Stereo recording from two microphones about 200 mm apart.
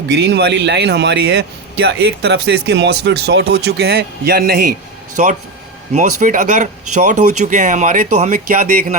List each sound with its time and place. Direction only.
0.3 s a man's voice: 55° right (ahead or behind)